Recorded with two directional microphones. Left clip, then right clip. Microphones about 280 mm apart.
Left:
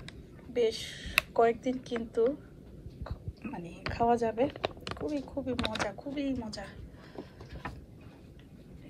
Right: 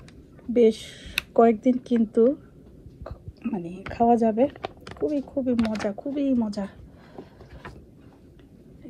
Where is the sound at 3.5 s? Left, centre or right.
Right.